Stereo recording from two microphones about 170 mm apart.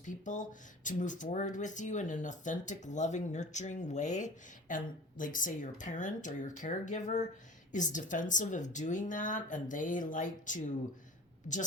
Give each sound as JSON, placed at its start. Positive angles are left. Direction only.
{"t": 0.0, "sound": "speech", "side_deg": 50}